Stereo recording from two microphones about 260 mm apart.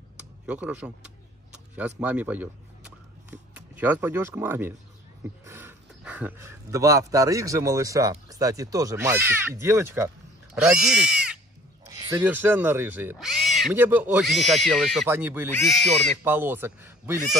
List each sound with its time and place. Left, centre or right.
0.5 s speech: centre
12.0 s speech: centre
16.3 s speech: centre